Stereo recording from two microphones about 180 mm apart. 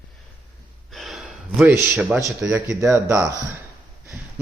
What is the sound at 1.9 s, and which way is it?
Speech, centre (ahead or behind).